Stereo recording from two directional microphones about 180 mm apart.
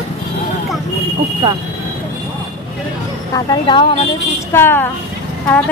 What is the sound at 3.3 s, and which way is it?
Speech, 25° left (ahead or behind).